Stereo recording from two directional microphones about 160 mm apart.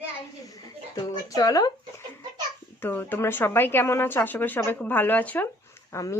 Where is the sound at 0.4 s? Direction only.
20° left (ahead or behind).